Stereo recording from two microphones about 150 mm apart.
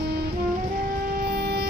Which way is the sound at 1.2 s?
90° right.